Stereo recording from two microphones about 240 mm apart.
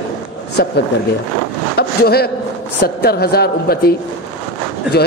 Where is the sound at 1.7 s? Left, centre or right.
Left.